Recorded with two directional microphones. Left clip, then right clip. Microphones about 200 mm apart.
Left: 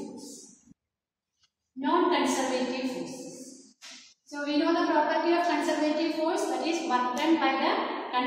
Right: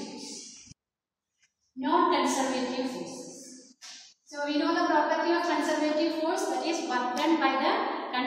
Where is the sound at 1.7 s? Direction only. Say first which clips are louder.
Even; 15° left (ahead or behind).